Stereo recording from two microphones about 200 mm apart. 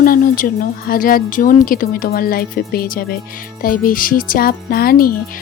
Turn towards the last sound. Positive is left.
turn(degrees=45)  # may be behind; listen again after turning